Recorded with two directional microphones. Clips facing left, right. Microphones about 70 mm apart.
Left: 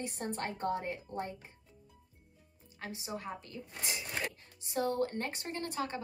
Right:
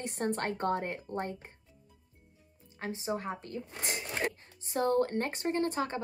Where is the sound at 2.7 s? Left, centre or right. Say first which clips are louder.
Right 7 dB; right.